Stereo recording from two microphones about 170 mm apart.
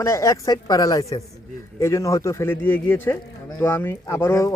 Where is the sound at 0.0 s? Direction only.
15° left (ahead or behind).